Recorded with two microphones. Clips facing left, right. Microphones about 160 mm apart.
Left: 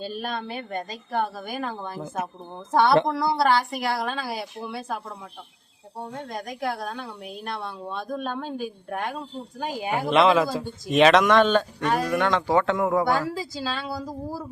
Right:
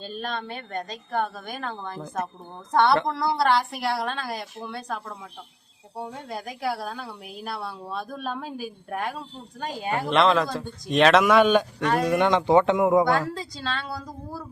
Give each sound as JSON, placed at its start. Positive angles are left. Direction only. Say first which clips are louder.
{"t": 0.0, "sound": "a woman's voice", "louder": "left 1 dB", "side_deg": 10}
{"t": 6.0, "sound": "a woman's voice", "louder": "even", "side_deg": -10}
{"t": 11.8, "sound": "a woman's voice", "louder": "right 1 dB", "side_deg": 0}
{"t": 12.0, "sound": "speech", "louder": "right 3 dB", "side_deg": -20}
{"t": 13.1, "sound": "a woman's voice", "louder": "even", "side_deg": 5}